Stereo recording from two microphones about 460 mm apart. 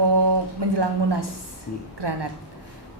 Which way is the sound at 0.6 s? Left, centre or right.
Right.